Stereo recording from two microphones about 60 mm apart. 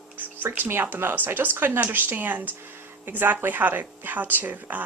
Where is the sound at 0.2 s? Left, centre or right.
Right.